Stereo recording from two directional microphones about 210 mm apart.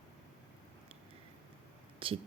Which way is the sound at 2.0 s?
25° right (ahead or behind).